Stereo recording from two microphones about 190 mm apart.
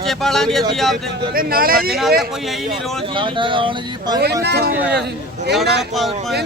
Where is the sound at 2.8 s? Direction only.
Centre (ahead or behind).